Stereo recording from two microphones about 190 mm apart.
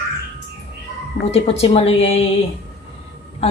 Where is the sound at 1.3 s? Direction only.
30° left (ahead or behind).